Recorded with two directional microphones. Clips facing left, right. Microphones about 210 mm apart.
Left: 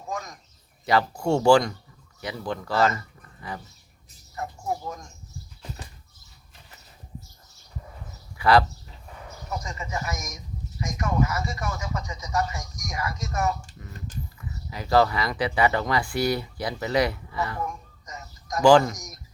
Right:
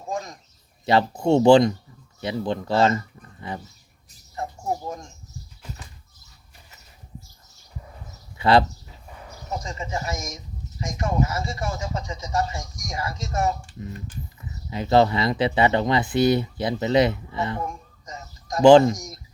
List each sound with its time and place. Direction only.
0.1 s speech: 30° right (ahead or behind)
8.4 s speech: 25° right (ahead or behind)